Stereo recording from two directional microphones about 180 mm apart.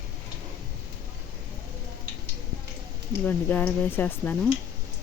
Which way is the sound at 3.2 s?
10° left (ahead or behind).